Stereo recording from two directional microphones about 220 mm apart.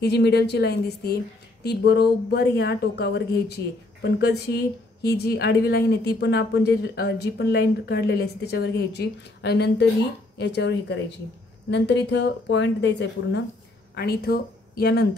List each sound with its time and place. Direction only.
0.0 s a woman's voice: 50° left (ahead or behind)